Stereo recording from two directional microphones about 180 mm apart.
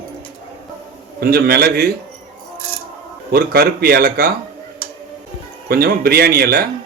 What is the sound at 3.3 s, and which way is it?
Speech, 60° right (ahead or behind).